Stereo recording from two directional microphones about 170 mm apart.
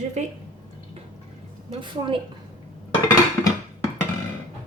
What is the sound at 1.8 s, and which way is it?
Speech, 30° right (ahead or behind).